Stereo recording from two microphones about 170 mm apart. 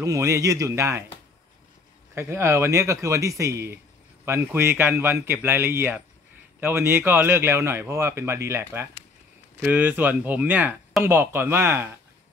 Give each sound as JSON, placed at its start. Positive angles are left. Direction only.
{"t": 0.0, "sound": "speech", "side_deg": -20}
{"t": 2.1, "sound": "speech", "side_deg": -15}